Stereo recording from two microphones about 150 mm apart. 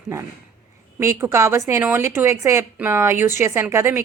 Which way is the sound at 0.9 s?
20° right (ahead or behind).